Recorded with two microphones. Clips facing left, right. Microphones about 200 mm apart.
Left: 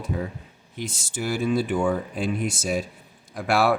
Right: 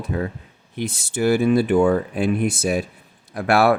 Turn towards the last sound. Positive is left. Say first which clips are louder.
# right 4 dB
turn(degrees=-60)  # may be behind; listen again after turning